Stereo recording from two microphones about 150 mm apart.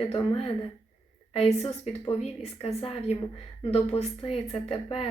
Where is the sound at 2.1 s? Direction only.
45° left (ahead or behind).